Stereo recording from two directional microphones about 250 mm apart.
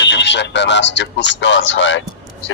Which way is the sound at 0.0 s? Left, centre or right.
Left.